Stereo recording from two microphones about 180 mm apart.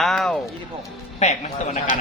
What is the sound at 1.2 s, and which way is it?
Speech, 40° left (ahead or behind).